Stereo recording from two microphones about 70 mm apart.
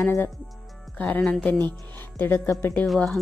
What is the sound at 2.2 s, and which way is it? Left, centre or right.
Speech, left.